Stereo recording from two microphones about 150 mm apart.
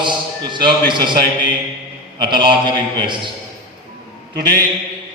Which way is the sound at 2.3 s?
30° right (ahead or behind).